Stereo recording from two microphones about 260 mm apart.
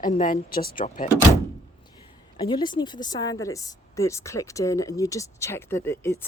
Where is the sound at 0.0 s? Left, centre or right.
Left.